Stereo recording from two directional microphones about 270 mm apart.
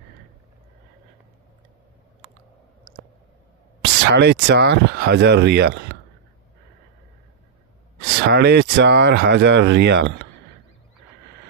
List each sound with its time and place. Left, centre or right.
3.8 s speech: right
8.0 s speech: right